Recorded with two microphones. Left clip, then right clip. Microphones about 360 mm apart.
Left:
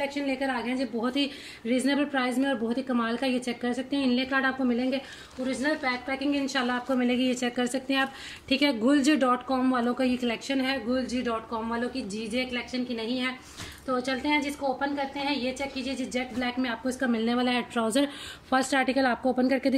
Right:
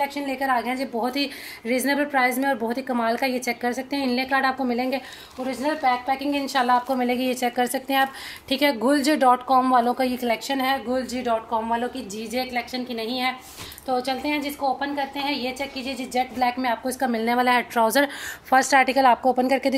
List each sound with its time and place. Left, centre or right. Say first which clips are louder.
0.3 s speech: right 6 dB; centre